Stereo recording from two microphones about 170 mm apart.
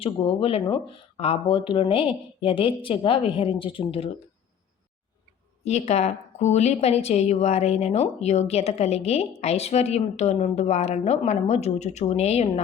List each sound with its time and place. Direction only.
0.0 s a woman's voice: 35° left (ahead or behind)
5.6 s a woman's voice: 40° left (ahead or behind)